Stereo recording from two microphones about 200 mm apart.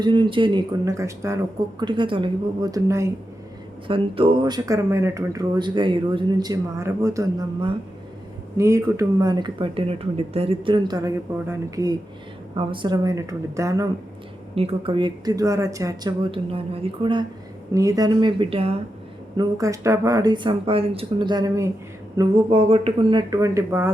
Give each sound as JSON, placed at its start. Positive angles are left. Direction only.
{"t": 0.0, "sound": "speech", "side_deg": -25}
{"t": 3.8, "sound": "speech", "side_deg": -25}
{"t": 14.5, "sound": "speech", "side_deg": -30}
{"t": 19.4, "sound": "speech", "side_deg": -15}
{"t": 22.2, "sound": "speech", "side_deg": -30}